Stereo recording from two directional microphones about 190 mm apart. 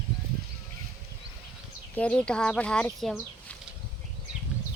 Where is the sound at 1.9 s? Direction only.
5° left (ahead or behind).